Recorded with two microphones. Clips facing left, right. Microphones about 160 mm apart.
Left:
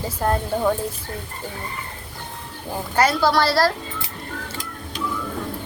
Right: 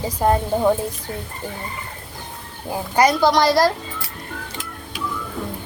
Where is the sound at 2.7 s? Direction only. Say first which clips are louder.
Right 3 dB; 15° right (ahead or behind).